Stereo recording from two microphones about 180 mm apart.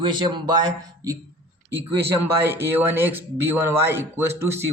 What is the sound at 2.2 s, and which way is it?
Speech, 10° right (ahead or behind).